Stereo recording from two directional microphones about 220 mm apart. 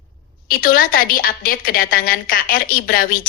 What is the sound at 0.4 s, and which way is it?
A woman's voice, 40° left (ahead or behind).